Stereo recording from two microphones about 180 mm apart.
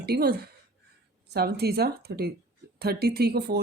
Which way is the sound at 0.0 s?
60° right (ahead or behind).